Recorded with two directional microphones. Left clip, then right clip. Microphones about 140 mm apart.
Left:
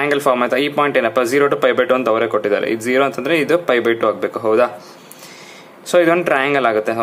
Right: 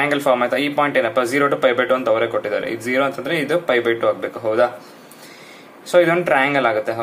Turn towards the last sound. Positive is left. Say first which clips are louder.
# left 2 dB
turn(degrees=40)  # may be behind; listen again after turning